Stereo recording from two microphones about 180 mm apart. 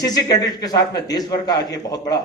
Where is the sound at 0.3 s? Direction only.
20° left (ahead or behind).